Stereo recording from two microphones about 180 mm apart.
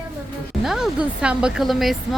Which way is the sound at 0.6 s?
5° right (ahead or behind).